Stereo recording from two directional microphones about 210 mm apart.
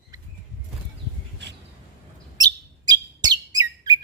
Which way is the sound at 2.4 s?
20° right (ahead or behind).